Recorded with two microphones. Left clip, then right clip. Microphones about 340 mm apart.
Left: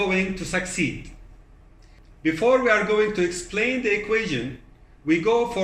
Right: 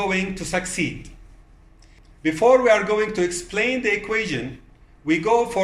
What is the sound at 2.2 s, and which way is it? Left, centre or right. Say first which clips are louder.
A man's voice: right 4 dB; right.